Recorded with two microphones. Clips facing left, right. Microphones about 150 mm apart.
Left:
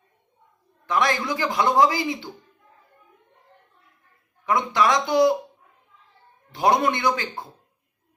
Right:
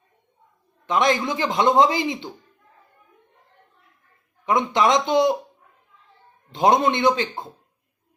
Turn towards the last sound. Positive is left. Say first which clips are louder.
# right 4 dB
turn(degrees=-25)  # may be behind; listen again after turning